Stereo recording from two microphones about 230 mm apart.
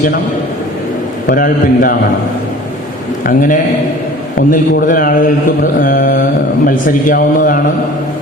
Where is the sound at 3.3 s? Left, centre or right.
Left.